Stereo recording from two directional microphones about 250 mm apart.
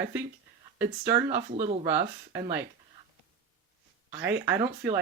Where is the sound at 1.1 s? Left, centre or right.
Right.